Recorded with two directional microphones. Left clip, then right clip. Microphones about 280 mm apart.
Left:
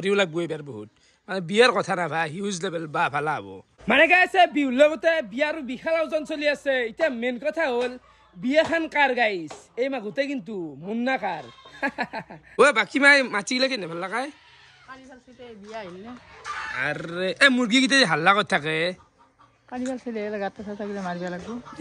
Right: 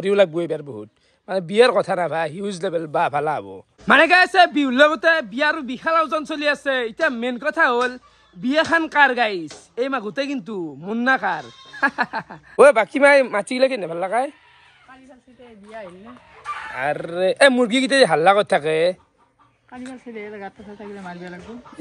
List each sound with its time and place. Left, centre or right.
0.0 s speech: centre
3.8 s a man's voice: centre
16.7 s speech: centre
20.1 s speech: left